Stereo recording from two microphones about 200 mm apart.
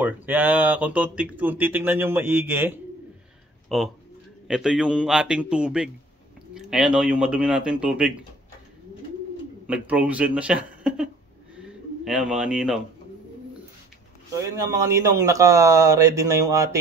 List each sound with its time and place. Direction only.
0.0 s speech: 10° right (ahead or behind)
3.6 s a man's voice: centre (ahead or behind)
9.7 s speech: 5° right (ahead or behind)
11.5 s bird: 5° right (ahead or behind)
14.3 s speech: 15° right (ahead or behind)